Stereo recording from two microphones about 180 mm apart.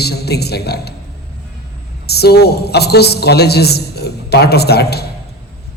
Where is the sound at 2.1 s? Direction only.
65° left (ahead or behind).